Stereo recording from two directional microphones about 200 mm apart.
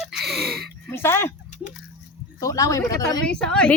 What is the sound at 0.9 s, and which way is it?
Speech, 10° left (ahead or behind).